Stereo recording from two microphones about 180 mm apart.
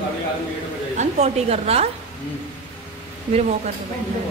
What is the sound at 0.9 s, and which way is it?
Speech, 40° right (ahead or behind).